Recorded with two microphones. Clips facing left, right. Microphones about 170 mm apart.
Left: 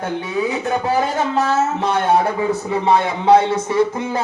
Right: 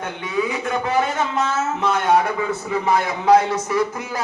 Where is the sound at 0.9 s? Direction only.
35° left (ahead or behind).